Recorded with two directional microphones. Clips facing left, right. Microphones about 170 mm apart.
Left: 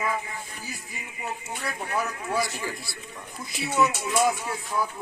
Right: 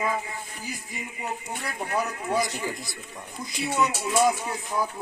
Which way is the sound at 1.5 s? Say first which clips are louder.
Right 1 dB; 20° right (ahead or behind).